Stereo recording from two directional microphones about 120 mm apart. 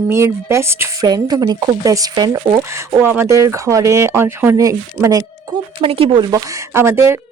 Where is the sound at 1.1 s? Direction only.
30° right (ahead or behind).